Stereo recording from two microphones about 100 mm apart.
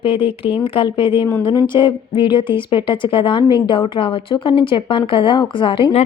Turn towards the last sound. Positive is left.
turn(degrees=65)  # may be behind; listen again after turning